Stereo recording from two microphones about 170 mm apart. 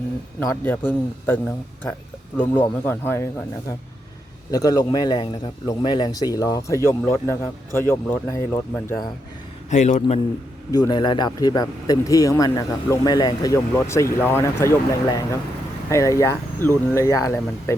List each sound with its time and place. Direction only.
0.3 s speech: 10° left (ahead or behind)
2.4 s speech: 10° left (ahead or behind)
4.5 s speech: 20° left (ahead or behind)
9.6 s a man's voice: 45° left (ahead or behind)
10.7 s speech: 25° left (ahead or behind)